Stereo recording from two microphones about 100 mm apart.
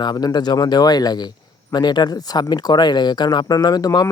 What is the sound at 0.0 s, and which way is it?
Speech, 45° left (ahead or behind).